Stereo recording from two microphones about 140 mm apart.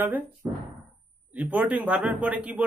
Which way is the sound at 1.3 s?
10° right (ahead or behind).